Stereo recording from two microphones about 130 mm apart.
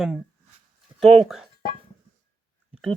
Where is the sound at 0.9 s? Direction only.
Centre (ahead or behind).